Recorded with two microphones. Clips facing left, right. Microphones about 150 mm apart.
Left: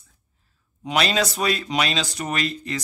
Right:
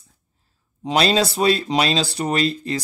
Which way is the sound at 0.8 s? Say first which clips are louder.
Right 4 dB; 30° right (ahead or behind).